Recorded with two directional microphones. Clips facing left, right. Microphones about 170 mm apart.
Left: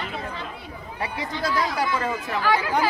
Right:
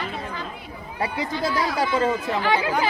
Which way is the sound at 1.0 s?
25° right (ahead or behind).